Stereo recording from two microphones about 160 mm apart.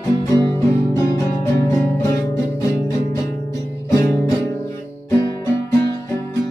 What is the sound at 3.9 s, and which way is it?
Music, 15° left (ahead or behind).